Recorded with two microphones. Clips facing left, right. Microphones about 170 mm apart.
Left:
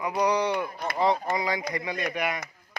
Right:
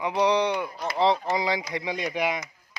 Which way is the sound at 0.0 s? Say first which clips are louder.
Right 2 dB; 20° right (ahead or behind).